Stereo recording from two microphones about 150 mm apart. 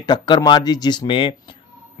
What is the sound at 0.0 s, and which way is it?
Speech, 30° left (ahead or behind).